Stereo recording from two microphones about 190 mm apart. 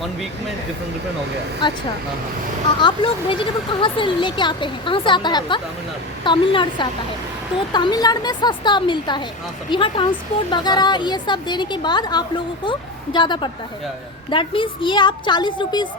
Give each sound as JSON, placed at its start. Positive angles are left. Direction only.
{"t": 2.8, "sound": "speech", "side_deg": 25}